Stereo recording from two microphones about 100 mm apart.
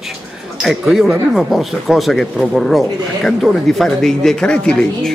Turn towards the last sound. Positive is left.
turn(degrees=10)  # may be behind; listen again after turning